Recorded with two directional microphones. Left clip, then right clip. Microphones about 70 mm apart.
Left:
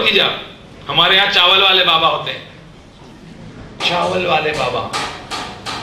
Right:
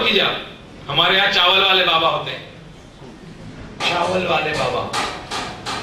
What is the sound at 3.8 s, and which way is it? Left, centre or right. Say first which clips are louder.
A man's voice: left 2 dB; left.